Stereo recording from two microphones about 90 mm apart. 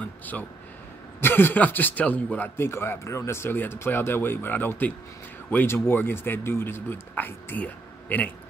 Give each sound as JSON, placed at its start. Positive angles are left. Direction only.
{"t": 0.0, "sound": "a man's voice", "side_deg": 20}